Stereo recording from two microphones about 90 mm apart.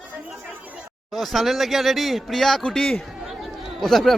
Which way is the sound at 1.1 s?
Centre (ahead or behind).